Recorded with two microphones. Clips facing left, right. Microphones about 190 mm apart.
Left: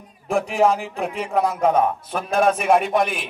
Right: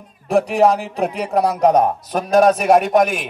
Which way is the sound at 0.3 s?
40° right (ahead or behind).